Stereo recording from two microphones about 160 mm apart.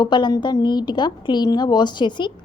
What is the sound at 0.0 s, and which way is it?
A woman's voice, 30° left (ahead or behind).